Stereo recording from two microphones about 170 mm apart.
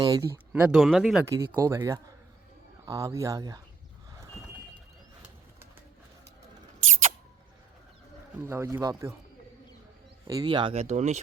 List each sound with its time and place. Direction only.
0.0 s speech: 20° right (ahead or behind)
0.5 s speech: 5° right (ahead or behind)
1.2 s speech: 20° right (ahead or behind)
8.4 s speech: 15° right (ahead or behind)
10.2 s speech: 25° right (ahead or behind); by 11.2 s 40° right (ahead or behind)